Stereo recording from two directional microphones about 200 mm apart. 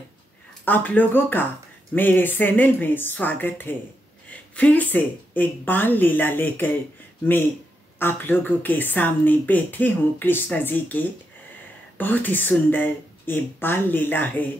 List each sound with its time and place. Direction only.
0.7 s speech: 10° left (ahead or behind)
8.0 s speech: 10° left (ahead or behind)
12.0 s speech: 10° left (ahead or behind)